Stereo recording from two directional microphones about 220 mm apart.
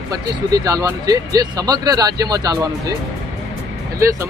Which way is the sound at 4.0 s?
15° right (ahead or behind).